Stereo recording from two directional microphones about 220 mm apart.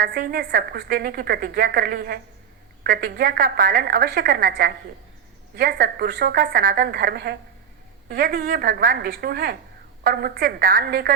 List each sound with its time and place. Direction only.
0.0 s a woman's voice: 40° right (ahead or behind)